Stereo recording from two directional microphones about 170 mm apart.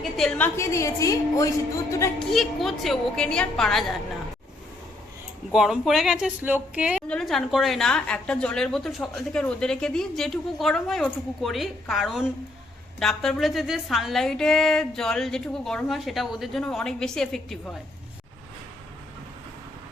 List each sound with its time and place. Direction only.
0.2 s a woman's voice: 5° left (ahead or behind)
2.1 s a woman's voice: centre (ahead or behind)
5.5 s a woman's voice: 5° right (ahead or behind)